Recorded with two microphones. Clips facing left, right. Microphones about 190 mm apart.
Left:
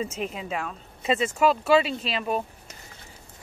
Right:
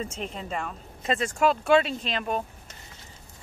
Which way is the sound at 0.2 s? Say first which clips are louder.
Left 2 dB; 5° left (ahead or behind).